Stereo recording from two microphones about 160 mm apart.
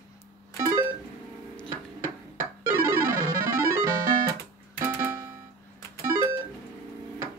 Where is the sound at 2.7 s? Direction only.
15° right (ahead or behind).